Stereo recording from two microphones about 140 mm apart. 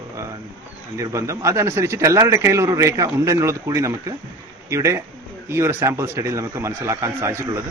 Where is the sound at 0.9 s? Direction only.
20° right (ahead or behind).